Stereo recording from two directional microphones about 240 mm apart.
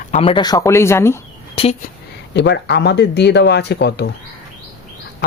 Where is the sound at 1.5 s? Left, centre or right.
Left.